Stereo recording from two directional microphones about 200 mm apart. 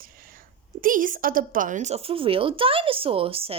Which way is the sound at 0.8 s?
45° right (ahead or behind).